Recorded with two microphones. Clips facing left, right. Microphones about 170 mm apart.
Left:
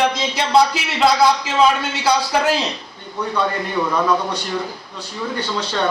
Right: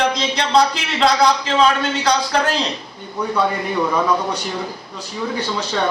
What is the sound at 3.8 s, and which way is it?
Speech, 10° right (ahead or behind).